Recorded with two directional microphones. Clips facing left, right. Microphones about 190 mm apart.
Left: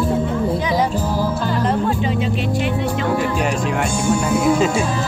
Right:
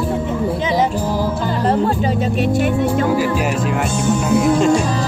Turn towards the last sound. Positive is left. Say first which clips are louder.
# right 3 dB
turn(degrees=5)  # may be behind; listen again after turning